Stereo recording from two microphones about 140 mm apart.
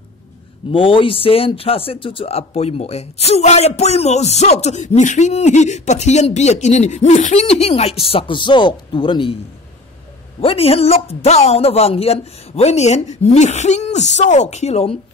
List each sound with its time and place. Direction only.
0.7 s speech: 40° left (ahead or behind)
10.4 s speech: 45° left (ahead or behind)